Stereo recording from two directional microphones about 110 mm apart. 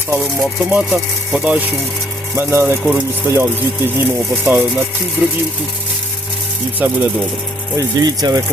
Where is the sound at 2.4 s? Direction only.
20° right (ahead or behind).